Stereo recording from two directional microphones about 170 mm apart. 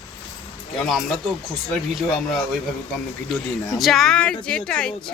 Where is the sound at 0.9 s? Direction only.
Centre (ahead or behind).